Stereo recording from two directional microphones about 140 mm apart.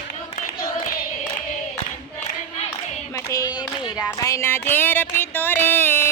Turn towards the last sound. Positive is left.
turn(degrees=15)  # may be behind; listen again after turning